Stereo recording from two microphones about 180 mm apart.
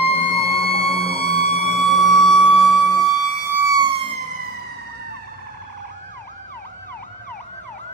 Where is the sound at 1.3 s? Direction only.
35° left (ahead or behind).